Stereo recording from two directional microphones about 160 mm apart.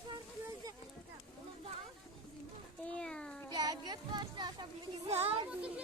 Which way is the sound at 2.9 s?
5° left (ahead or behind).